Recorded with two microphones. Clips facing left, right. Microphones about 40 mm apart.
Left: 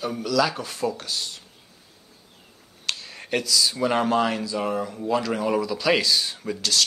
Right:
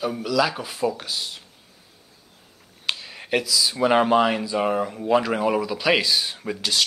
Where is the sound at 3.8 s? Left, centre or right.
Right.